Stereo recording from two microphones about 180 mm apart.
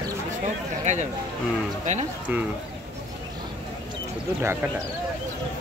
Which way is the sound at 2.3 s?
10° right (ahead or behind).